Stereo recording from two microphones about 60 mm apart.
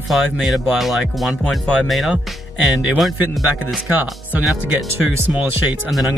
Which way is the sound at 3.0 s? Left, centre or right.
Centre.